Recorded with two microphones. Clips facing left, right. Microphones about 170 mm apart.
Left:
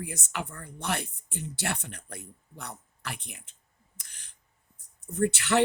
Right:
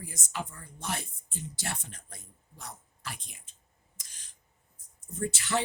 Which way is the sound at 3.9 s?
60° left (ahead or behind).